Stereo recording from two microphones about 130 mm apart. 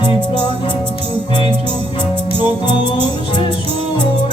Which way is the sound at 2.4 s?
35° left (ahead or behind).